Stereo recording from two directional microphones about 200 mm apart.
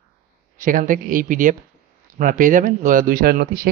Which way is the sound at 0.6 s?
40° right (ahead or behind).